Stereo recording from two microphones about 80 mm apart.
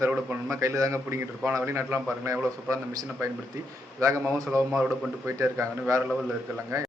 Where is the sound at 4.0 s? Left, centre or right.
Right.